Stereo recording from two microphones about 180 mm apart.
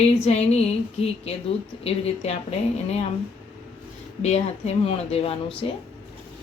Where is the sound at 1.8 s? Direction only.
35° left (ahead or behind).